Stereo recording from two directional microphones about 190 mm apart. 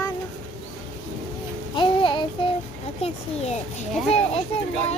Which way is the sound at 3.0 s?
30° left (ahead or behind).